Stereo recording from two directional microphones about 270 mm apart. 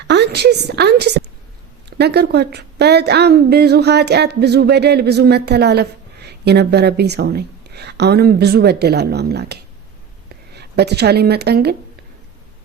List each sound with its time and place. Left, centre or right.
0.1 s a woman's voice: right